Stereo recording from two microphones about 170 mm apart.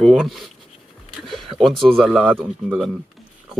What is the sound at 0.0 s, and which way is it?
A woman's voice, centre (ahead or behind).